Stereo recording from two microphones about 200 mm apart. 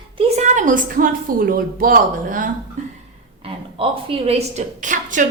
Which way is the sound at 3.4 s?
30° right (ahead or behind).